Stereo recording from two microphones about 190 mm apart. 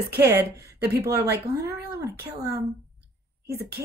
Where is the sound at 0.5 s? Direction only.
60° right (ahead or behind).